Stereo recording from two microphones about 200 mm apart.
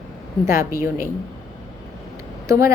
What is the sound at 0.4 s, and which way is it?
Speech, 15° right (ahead or behind).